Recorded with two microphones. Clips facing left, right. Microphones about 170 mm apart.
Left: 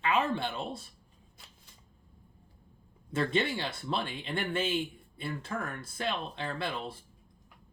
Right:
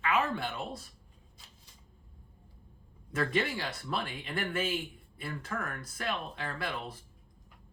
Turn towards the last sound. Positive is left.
turn(degrees=25)  # may be behind; listen again after turning